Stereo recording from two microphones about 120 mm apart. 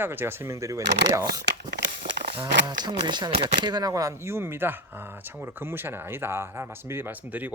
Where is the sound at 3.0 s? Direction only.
40° right (ahead or behind).